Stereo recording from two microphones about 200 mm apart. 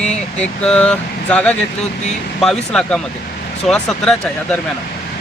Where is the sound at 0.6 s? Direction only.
5° left (ahead or behind).